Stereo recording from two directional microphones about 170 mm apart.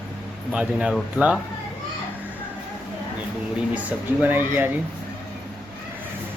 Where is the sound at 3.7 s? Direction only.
10° right (ahead or behind).